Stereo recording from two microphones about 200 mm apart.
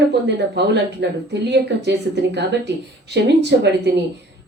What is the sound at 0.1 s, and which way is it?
A woman's voice, 55° right (ahead or behind).